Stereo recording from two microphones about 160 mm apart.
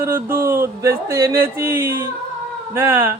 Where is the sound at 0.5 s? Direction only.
15° right (ahead or behind).